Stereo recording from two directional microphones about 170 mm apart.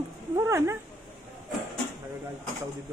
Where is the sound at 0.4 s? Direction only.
15° right (ahead or behind).